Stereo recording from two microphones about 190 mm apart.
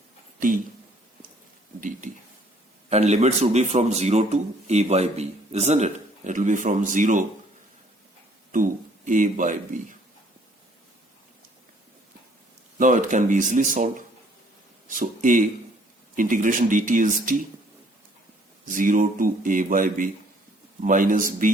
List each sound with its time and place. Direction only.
0.3 s speech: 45° right (ahead or behind)
2.9 s a man's voice: 35° right (ahead or behind)
8.5 s speech: 45° right (ahead or behind)
12.8 s speech: 45° right (ahead or behind)
18.7 s speech: 45° right (ahead or behind)